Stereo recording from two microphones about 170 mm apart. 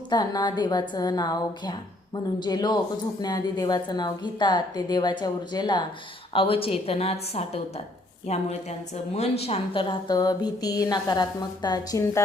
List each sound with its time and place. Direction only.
0.1 s a woman's voice: 25° left (ahead or behind)